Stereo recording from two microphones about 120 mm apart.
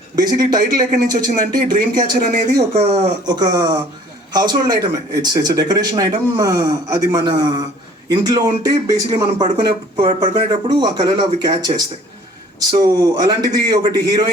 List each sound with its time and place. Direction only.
0.2 s speech: 30° right (ahead or behind)
2.7 s speech: 60° right (ahead or behind)
3.2 s speech: 35° right (ahead or behind)
9.6 s speech: 40° right (ahead or behind)